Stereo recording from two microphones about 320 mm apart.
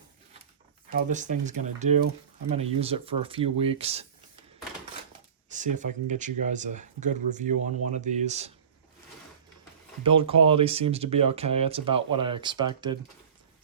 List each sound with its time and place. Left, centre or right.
0.9 s speech: right
5.5 s speech: right
10.0 s speech: centre